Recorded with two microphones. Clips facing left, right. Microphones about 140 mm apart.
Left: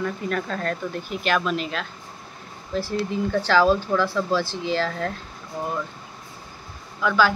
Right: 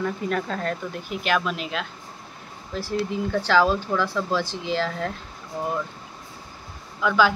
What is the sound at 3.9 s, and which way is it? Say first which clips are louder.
Speech: left 2 dB; 5° left (ahead or behind).